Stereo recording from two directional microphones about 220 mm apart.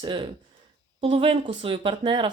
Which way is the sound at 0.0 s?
20° right (ahead or behind).